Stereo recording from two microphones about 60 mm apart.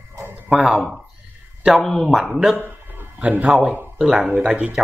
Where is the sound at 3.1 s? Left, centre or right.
Right.